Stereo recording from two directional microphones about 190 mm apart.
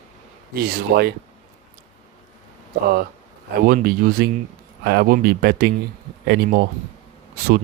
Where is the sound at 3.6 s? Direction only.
50° right (ahead or behind).